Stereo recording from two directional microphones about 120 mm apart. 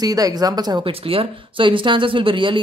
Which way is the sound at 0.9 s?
50° right (ahead or behind).